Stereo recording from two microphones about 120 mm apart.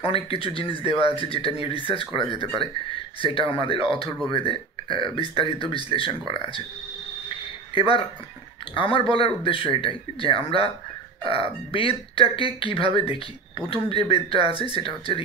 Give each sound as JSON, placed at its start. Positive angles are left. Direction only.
{"t": 0.0, "sound": "speech", "side_deg": 50}
{"t": 7.2, "sound": "a sound", "side_deg": 50}
{"t": 8.7, "sound": "speech", "side_deg": 45}